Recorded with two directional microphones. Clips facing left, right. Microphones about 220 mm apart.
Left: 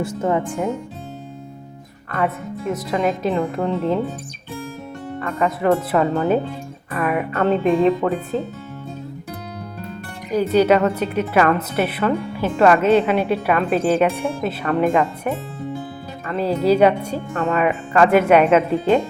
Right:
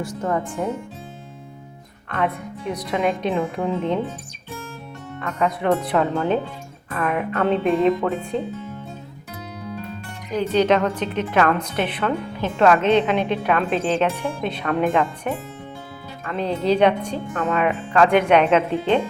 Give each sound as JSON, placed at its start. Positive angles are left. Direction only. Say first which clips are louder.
{"t": 0.2, "sound": "speech", "louder": "left 2 dB", "side_deg": 20}
{"t": 2.0, "sound": "speech", "louder": "left 2 dB", "side_deg": 5}
{"t": 5.2, "sound": "speech", "louder": "left 2 dB", "side_deg": 5}
{"t": 10.3, "sound": "speech", "louder": "left 3 dB", "side_deg": 10}